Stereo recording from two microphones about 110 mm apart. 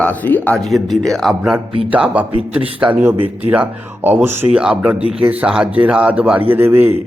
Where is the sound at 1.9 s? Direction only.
15° right (ahead or behind).